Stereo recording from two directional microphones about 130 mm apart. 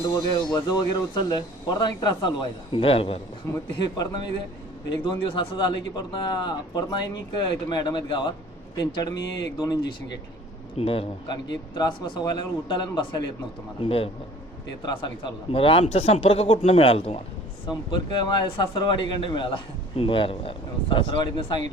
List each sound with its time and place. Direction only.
0.5 s speech: 30° left (ahead or behind)
2.7 s speech: 45° left (ahead or behind)
3.4 s speech: 25° left (ahead or behind)
10.8 s speech: 50° left (ahead or behind)
11.3 s speech: 35° left (ahead or behind)
13.8 s speech: 45° left (ahead or behind)
17.7 s speech: 35° left (ahead or behind)